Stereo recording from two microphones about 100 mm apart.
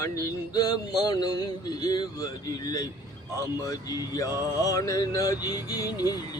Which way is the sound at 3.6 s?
35° left (ahead or behind).